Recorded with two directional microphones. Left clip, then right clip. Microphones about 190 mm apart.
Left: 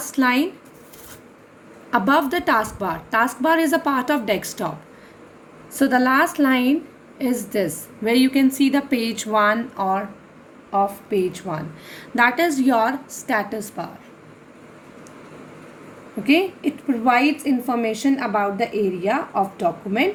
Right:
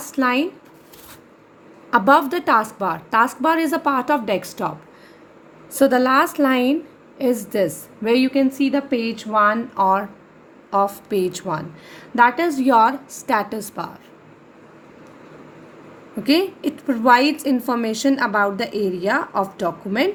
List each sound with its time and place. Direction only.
0.0 s speech: 30° right (ahead or behind)
1.9 s a woman's voice: 40° right (ahead or behind)
5.7 s a woman's voice: 40° right (ahead or behind)
10.7 s a woman's voice: 50° right (ahead or behind)
16.2 s a woman's voice: 50° right (ahead or behind)